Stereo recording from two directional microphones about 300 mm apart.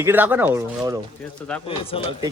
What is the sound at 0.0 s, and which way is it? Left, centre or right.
Speech, centre.